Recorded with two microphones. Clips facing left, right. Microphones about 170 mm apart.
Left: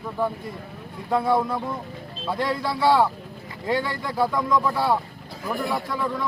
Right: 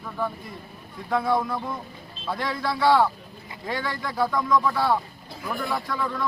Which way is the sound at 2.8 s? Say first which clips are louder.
Even; 10° left (ahead or behind).